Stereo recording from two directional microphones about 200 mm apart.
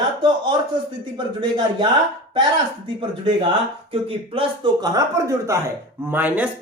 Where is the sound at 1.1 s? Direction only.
25° right (ahead or behind).